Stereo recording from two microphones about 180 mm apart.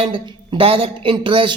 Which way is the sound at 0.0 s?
30° right (ahead or behind).